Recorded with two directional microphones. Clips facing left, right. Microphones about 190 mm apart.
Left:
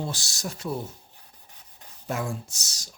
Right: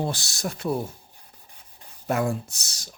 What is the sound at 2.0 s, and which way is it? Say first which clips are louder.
Speech: right 6 dB; 60° right (ahead or behind).